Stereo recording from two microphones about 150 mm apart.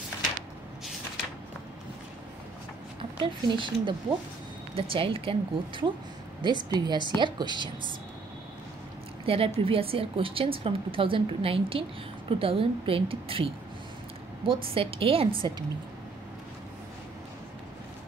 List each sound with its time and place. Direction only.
3.0 s a woman's voice: 35° right (ahead or behind)
9.2 s a woman's voice: 40° right (ahead or behind)